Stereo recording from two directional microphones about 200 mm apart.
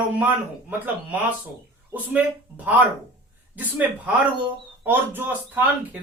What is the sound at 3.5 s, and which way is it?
Speech, 10° right (ahead or behind).